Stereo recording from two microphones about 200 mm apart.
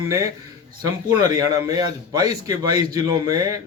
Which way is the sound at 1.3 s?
20° right (ahead or behind).